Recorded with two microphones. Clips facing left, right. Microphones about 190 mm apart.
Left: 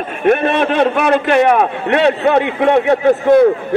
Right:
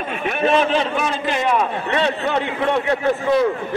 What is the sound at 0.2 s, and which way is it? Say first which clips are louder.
A man's voice: left 5 dB; 55° left (ahead or behind).